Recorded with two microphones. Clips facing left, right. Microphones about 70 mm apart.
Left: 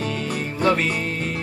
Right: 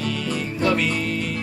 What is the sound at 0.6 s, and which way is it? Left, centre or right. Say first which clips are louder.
Music: left 2 dB; left.